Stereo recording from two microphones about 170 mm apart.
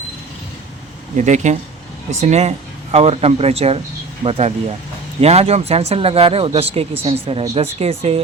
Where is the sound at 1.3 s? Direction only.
45° right (ahead or behind).